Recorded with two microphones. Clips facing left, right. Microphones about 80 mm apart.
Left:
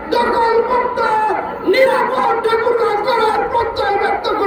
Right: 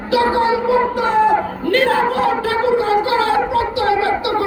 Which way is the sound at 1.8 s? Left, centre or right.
Centre.